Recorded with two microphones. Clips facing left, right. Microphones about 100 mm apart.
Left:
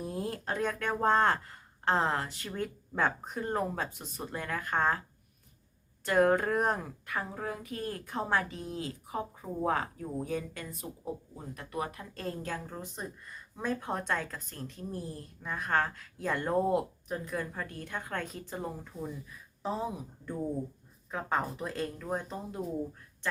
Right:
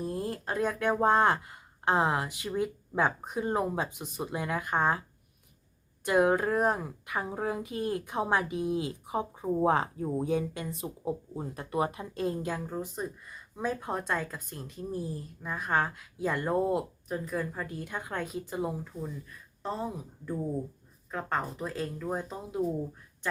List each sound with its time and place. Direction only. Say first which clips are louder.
0.0 s speech: right 2 dB; centre (ahead or behind)
6.1 s speech: right 1 dB; 10° right (ahead or behind)
7.1 s speech: right 4 dB; 20° right (ahead or behind)
19.6 s speech: even; 5° left (ahead or behind)